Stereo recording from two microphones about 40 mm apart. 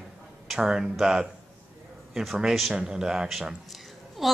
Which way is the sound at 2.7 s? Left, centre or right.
Right.